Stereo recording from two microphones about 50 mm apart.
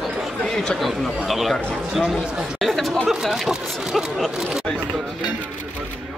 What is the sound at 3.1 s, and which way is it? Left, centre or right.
Speech, centre.